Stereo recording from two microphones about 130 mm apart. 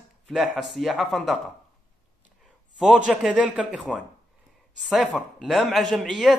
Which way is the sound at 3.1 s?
Centre (ahead or behind).